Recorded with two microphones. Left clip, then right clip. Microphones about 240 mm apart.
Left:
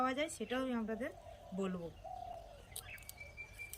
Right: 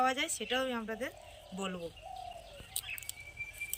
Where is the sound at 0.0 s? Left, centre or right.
Centre.